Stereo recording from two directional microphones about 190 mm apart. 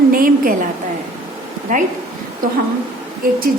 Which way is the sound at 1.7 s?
40° right (ahead or behind).